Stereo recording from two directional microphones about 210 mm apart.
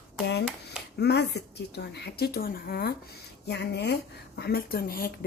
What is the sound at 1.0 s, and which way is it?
A woman's voice, 55° left (ahead or behind).